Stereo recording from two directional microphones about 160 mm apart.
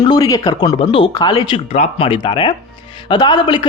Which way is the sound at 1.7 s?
40° left (ahead or behind).